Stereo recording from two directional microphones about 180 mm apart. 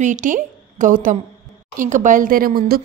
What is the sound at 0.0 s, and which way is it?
A woman's voice, 45° right (ahead or behind).